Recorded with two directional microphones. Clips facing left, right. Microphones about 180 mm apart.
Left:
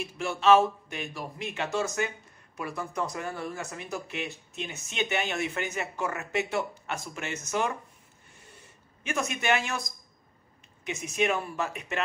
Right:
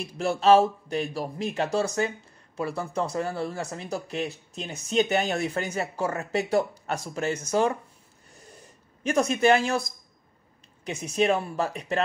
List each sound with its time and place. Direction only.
0.0 s speech: 35° right (ahead or behind)
9.0 s speech: 35° right (ahead or behind)